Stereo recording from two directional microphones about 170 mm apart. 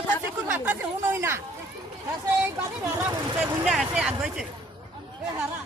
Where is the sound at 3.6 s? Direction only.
Centre (ahead or behind).